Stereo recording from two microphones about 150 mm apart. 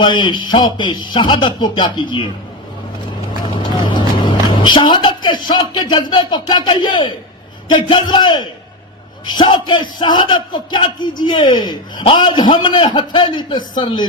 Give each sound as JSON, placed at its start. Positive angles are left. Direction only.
{"t": 0.0, "sound": "a man's voice", "side_deg": 30}
{"t": 3.8, "sound": "music", "side_deg": 30}
{"t": 5.5, "sound": "a man's voice", "side_deg": 30}